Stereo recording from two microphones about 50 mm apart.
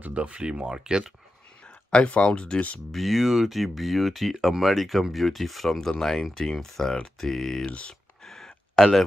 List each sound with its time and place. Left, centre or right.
0.0 s speech: right
1.9 s speech: left
2.9 s speech: centre
7.6 s speech: left
8.2 s a sound: centre